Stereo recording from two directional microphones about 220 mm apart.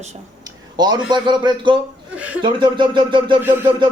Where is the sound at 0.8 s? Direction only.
20° right (ahead or behind).